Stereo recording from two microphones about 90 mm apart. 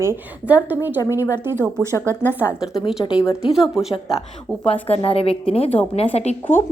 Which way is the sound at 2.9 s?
10° right (ahead or behind).